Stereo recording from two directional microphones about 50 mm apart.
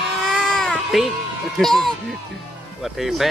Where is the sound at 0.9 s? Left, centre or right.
Centre.